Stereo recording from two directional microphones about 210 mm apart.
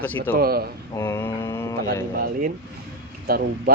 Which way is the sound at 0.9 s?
15° left (ahead or behind).